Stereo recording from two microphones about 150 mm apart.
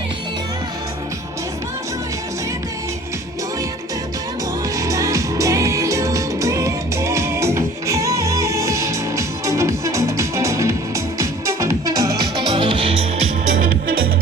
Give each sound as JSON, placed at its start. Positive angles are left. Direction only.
{"t": 4.8, "sound": "music", "side_deg": -20}
{"t": 13.5, "sound": "music", "side_deg": -70}